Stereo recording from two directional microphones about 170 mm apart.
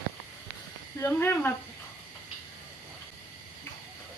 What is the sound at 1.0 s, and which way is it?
Speech, 10° left (ahead or behind).